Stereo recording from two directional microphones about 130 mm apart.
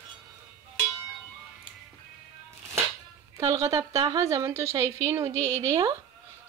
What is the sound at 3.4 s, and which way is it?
A woman's voice, 25° right (ahead or behind).